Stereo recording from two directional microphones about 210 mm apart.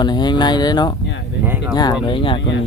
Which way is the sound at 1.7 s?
20° left (ahead or behind).